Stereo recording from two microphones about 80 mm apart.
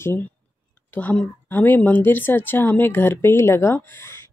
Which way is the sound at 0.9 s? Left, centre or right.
Left.